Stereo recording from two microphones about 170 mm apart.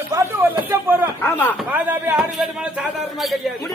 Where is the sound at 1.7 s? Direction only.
10° right (ahead or behind).